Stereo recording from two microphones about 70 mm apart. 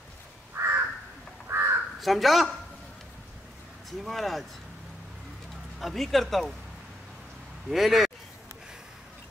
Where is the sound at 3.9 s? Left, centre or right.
Centre.